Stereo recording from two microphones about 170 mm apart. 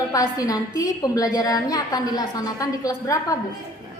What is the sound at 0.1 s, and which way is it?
A woman's voice, 20° left (ahead or behind).